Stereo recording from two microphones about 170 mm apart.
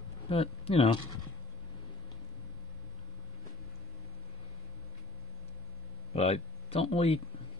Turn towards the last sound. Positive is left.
turn(degrees=35)  # may be behind; listen again after turning